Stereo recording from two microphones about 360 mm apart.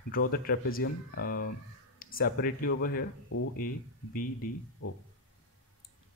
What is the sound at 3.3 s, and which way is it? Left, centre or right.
Speech, left.